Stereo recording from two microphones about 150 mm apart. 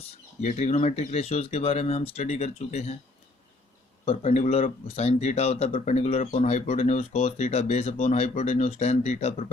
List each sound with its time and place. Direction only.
0.4 s speech: 50° left (ahead or behind)
4.0 s speech: 50° left (ahead or behind)